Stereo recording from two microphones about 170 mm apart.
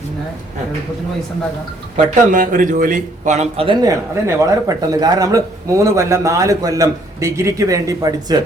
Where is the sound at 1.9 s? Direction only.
50° right (ahead or behind).